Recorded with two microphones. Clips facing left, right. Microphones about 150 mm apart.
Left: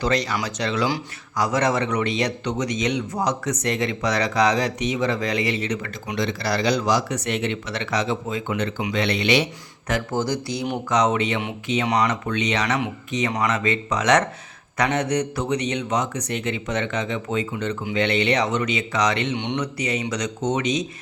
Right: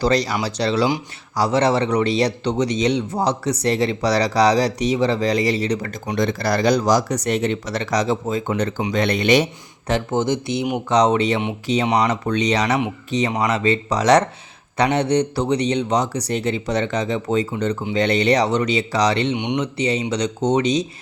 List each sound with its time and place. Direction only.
0.0 s speech: 35° right (ahead or behind)
9.8 s speech: 25° right (ahead or behind)
19.4 s speech: 20° right (ahead or behind)